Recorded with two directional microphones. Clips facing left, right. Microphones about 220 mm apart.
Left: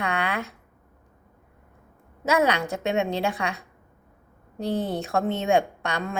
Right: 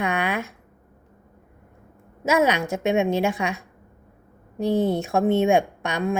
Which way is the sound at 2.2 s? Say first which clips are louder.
Right 2 dB; 15° right (ahead or behind).